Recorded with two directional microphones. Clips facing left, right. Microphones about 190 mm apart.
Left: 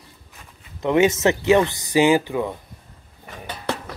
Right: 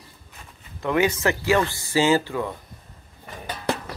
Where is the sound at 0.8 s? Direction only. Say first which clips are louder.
Left 4 dB; 20° left (ahead or behind).